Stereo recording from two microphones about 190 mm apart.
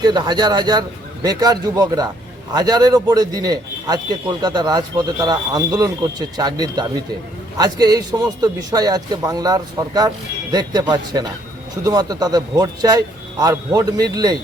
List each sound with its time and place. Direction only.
0.0 s a man's voice: 25° right (ahead or behind)